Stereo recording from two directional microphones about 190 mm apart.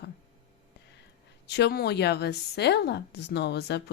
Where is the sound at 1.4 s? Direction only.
60° left (ahead or behind).